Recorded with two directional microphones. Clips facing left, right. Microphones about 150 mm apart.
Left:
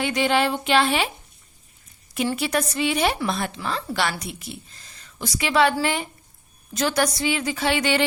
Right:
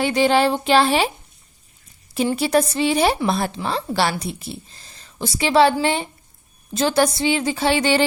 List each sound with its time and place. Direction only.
0.0 s speech: 35° right (ahead or behind)
2.3 s a woman's voice: 35° right (ahead or behind)